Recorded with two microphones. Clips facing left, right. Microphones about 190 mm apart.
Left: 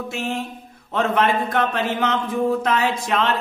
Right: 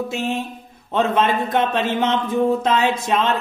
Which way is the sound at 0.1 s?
20° right (ahead or behind).